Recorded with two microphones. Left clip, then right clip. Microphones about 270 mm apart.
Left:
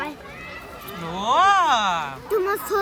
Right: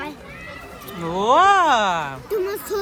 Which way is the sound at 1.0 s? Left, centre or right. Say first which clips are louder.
Right 3 dB; centre.